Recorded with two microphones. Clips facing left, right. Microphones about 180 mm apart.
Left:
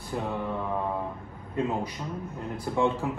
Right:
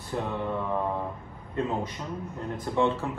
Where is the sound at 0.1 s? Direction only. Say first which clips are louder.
Right 1 dB; 5° left (ahead or behind).